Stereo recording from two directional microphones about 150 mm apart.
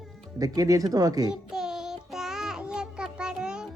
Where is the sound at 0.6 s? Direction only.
25° right (ahead or behind).